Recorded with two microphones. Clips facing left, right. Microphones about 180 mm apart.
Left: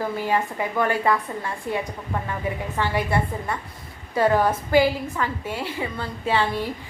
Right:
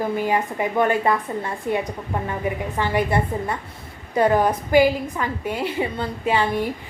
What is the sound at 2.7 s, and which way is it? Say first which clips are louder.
Speech: right 3 dB; 20° right (ahead or behind).